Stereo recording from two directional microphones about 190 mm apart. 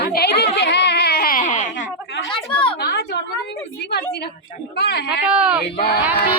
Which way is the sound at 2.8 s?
60° left (ahead or behind).